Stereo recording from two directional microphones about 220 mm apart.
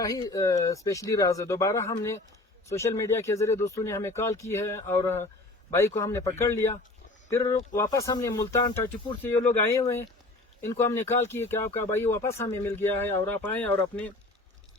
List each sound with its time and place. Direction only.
0.0 s speech: 15° left (ahead or behind)